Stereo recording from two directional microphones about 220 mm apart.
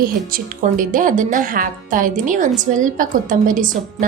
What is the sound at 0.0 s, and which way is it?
A woman's voice, 40° right (ahead or behind).